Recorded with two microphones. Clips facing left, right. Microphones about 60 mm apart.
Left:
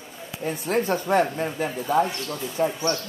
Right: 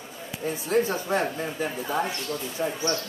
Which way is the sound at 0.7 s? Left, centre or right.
Left.